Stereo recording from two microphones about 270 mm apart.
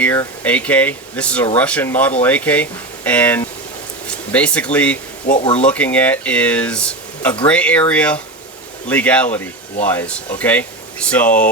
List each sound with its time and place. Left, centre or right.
0.0 s speech: centre
5.2 s speech: left
5.6 s speech: centre